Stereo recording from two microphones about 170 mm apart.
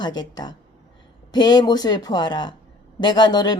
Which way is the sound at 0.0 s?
25° left (ahead or behind).